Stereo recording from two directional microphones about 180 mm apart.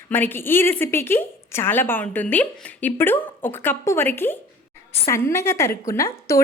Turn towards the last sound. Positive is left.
turn(degrees=15)  # may be behind; listen again after turning